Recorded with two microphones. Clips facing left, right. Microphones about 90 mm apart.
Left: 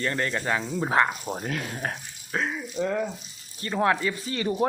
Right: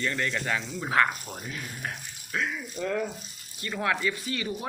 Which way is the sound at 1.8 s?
40° left (ahead or behind).